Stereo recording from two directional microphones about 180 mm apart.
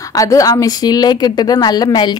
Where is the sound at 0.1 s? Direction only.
20° left (ahead or behind).